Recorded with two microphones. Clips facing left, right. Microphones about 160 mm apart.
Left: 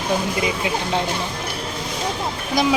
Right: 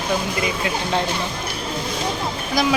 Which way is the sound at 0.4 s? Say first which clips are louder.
Left 1 dB; 15° left (ahead or behind).